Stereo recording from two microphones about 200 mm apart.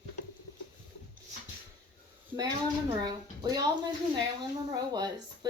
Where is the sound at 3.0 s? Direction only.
20° right (ahead or behind).